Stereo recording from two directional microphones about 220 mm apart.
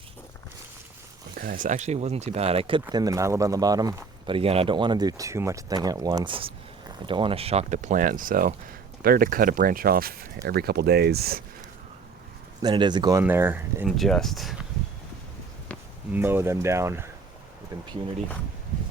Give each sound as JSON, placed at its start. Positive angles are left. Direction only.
{"t": 1.4, "sound": "speech", "side_deg": -40}
{"t": 12.6, "sound": "speech", "side_deg": -20}
{"t": 16.1, "sound": "speech", "side_deg": -10}